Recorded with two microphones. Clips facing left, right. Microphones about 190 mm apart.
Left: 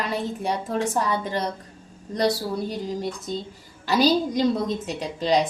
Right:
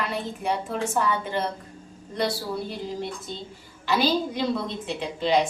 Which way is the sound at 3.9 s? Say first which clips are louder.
Left 3 dB; 40° left (ahead or behind).